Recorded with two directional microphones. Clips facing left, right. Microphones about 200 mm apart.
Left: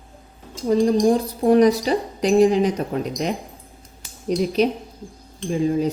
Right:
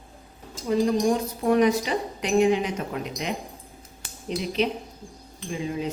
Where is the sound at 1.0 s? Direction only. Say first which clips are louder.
Left 5 dB; 35° left (ahead or behind).